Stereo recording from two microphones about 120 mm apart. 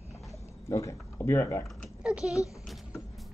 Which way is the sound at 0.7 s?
25° left (ahead or behind).